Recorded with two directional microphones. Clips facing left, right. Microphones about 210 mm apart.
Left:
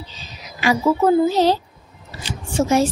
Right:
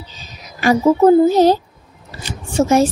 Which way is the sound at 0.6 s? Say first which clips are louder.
Right 5 dB; 45° right (ahead or behind).